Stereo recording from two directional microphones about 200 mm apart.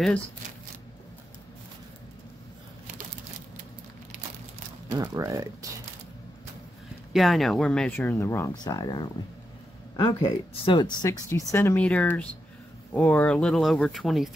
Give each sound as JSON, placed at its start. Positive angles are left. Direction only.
{"t": 4.8, "sound": "speech", "side_deg": -20}
{"t": 7.1, "sound": "speech", "side_deg": 0}